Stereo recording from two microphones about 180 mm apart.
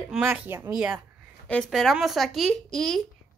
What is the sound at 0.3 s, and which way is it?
A woman's voice, 10° right (ahead or behind).